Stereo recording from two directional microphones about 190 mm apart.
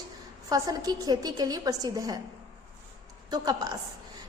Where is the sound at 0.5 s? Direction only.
15° right (ahead or behind).